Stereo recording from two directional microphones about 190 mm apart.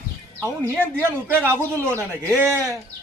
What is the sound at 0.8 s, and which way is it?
Speech, 10° right (ahead or behind).